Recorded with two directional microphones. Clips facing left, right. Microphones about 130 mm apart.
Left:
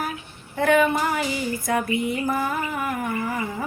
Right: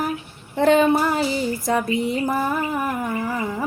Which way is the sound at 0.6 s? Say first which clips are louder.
Right 3 dB; 30° right (ahead or behind).